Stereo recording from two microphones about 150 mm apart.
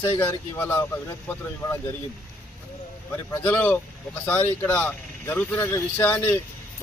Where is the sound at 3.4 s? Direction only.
15° left (ahead or behind).